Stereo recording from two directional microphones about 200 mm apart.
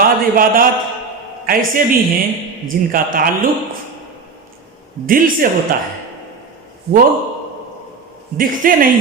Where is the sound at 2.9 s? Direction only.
45° right (ahead or behind).